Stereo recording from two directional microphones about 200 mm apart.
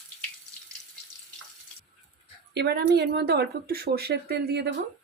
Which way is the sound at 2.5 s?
55° right (ahead or behind).